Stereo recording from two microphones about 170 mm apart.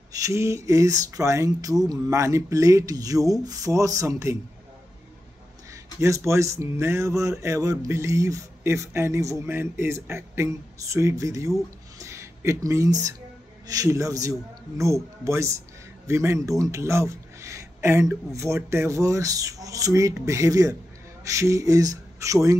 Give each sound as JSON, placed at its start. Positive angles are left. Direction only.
{"t": 0.1, "sound": "speech", "side_deg": -20}
{"t": 5.7, "sound": "speech", "side_deg": -20}